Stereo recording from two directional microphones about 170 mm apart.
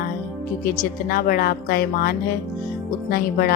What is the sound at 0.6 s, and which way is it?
Speech, 60° left (ahead or behind).